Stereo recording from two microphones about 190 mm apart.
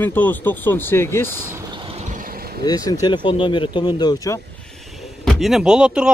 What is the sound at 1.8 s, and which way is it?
Vehicle, 35° right (ahead or behind).